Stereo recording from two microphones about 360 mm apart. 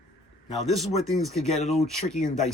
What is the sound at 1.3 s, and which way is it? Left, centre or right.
Speech, centre.